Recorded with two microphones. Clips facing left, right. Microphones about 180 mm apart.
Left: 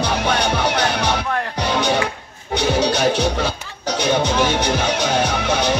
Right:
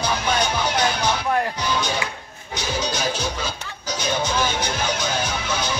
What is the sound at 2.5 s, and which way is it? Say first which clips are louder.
Speech: left 8 dB; 65° left (ahead or behind).